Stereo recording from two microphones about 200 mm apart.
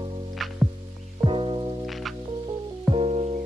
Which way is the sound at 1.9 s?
Centre (ahead or behind).